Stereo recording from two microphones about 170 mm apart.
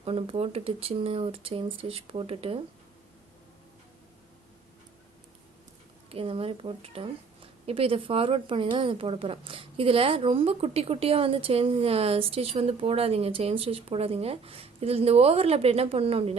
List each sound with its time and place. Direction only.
0.0 s speech: 35° right (ahead or behind)
6.1 s speech: 35° right (ahead or behind)